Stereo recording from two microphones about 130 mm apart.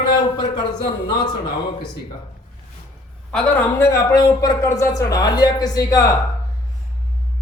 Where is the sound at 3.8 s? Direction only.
20° left (ahead or behind).